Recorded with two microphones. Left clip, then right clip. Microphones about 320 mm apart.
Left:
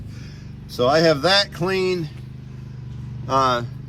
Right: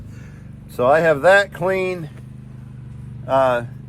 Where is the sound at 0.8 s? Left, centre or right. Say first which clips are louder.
Right 3 dB; centre.